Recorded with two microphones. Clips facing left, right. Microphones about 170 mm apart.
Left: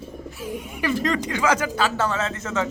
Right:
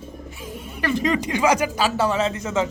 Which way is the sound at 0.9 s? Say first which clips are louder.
Right 2 dB; centre (ahead or behind).